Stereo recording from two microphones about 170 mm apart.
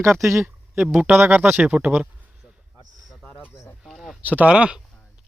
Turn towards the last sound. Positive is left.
turn(degrees=-5)  # may be behind; listen again after turning